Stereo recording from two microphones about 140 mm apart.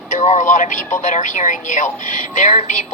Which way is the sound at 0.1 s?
60° left (ahead or behind).